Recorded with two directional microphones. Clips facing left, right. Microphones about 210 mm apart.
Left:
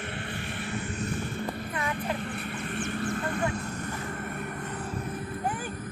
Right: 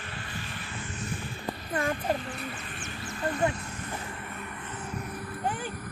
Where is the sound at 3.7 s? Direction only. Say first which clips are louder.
Left 3 dB; 45° left (ahead or behind).